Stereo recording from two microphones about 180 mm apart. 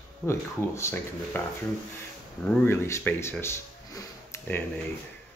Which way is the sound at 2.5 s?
15° left (ahead or behind).